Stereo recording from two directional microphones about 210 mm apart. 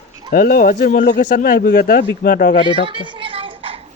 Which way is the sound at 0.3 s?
45° left (ahead or behind).